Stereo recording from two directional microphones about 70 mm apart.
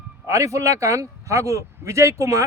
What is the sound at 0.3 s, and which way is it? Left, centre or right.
A man's voice, right.